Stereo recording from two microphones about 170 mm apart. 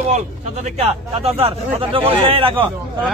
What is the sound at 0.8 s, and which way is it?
Speech, 35° right (ahead or behind).